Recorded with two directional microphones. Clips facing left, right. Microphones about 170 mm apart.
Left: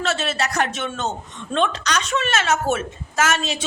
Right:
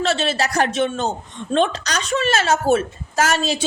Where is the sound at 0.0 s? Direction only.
30° right (ahead or behind).